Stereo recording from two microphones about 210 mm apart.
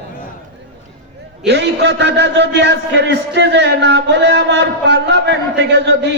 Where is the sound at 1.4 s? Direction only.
55° right (ahead or behind).